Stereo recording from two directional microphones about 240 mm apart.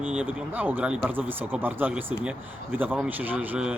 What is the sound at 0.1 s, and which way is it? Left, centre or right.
Speech, centre.